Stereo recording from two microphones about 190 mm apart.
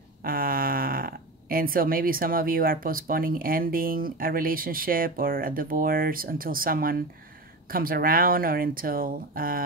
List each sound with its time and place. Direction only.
0.2 s speech: 50° right (ahead or behind)